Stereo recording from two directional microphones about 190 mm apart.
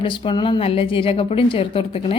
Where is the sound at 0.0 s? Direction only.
25° left (ahead or behind).